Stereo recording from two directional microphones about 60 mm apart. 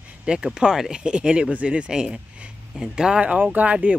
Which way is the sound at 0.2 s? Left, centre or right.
Centre.